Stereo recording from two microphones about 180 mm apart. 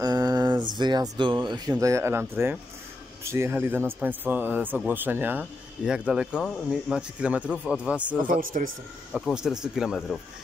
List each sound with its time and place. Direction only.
0.0 s mantra: 20° right (ahead or behind)
0.7 s speech: 25° right (ahead or behind); by 8.3 s 10° right (ahead or behind)
8.3 s speech: 50° right (ahead or behind)
9.1 s speech: 5° right (ahead or behind)